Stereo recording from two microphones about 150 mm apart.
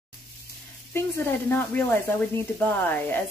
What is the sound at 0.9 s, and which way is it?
Speech, 15° left (ahead or behind).